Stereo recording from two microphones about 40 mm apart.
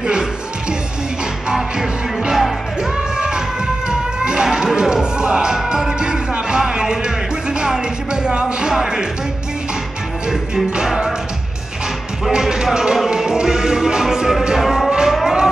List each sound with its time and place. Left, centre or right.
0.0 s music: right
1.5 s music: centre
10.3 s music: centre
12.3 s music: centre
14.9 s cattle: centre
15.2 s a sound: centre